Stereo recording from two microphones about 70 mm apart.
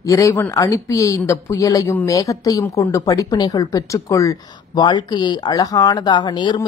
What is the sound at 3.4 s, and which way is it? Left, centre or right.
Speech, left.